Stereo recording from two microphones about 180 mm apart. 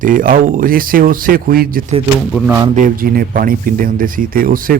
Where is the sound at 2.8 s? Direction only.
50° right (ahead or behind).